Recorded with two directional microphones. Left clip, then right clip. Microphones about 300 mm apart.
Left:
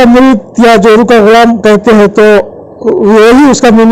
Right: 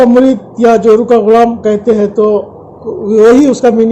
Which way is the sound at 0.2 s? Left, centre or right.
Left.